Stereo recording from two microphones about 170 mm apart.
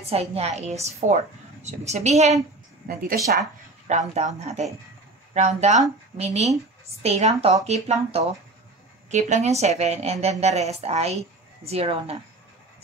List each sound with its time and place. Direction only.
0.1 s a woman's voice: 35° right (ahead or behind)
2.9 s speech: 55° right (ahead or behind)
3.3 s a woman's voice: 45° right (ahead or behind)